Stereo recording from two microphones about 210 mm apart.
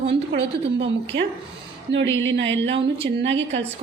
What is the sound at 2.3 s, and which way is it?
A woman's voice, 60° right (ahead or behind).